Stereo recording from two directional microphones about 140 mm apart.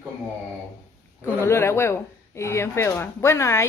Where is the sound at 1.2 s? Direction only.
20° left (ahead or behind).